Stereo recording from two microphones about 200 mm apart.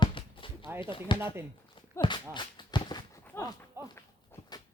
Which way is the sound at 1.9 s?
20° left (ahead or behind).